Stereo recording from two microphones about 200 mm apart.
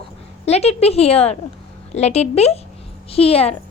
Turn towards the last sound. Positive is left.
turn(degrees=30)  # may be behind; listen again after turning